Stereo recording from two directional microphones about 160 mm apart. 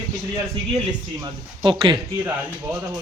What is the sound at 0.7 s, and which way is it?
Speech, 25° right (ahead or behind).